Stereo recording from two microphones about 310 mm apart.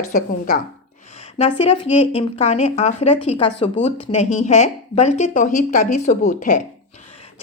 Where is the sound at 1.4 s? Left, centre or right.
Centre.